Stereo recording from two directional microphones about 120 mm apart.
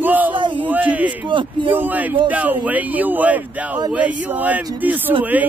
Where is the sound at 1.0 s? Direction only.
45° right (ahead or behind).